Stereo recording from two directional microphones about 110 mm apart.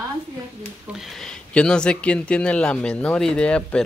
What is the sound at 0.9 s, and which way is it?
Speech, 5° left (ahead or behind).